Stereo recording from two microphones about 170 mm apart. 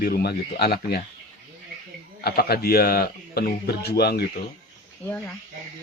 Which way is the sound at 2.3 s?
65° left (ahead or behind).